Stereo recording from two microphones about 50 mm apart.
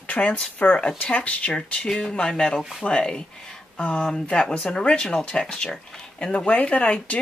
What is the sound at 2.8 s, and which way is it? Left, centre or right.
Speech, centre.